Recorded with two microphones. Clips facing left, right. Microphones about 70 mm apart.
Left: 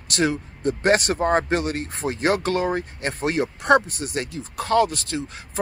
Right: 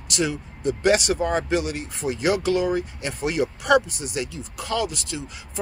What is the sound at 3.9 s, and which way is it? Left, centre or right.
Speech, left.